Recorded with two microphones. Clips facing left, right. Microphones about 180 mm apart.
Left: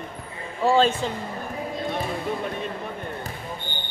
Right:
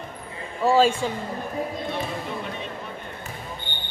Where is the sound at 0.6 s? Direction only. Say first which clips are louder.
Right 1 dB; 5° right (ahead or behind).